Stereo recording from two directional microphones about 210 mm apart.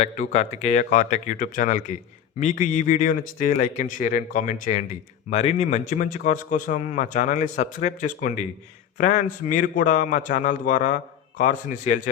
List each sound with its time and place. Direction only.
0.0 s a man's voice: 30° left (ahead or behind)